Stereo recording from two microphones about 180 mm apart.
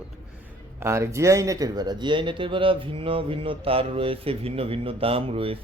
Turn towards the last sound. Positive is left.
turn(degrees=-30)  # may be behind; listen again after turning